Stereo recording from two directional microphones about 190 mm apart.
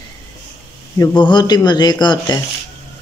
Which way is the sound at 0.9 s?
20° left (ahead or behind).